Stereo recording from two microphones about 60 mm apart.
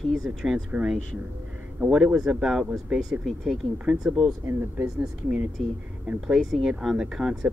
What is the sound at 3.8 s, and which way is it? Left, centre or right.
Speech, centre.